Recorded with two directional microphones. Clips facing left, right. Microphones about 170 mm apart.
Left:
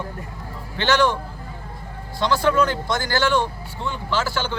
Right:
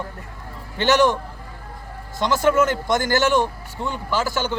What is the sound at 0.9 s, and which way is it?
A man's voice, 20° right (ahead or behind).